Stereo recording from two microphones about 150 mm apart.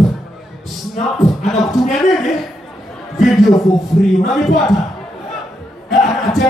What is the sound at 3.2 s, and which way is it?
Speech, centre (ahead or behind).